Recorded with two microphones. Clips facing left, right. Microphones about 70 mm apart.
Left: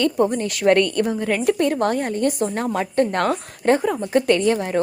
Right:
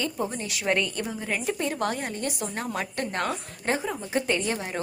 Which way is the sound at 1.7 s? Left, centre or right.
Left.